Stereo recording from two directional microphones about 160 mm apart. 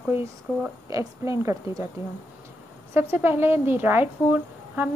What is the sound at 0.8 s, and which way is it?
Speech, 20° right (ahead or behind).